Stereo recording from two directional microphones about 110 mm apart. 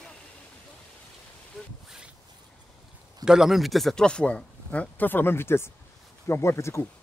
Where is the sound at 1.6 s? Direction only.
Centre (ahead or behind).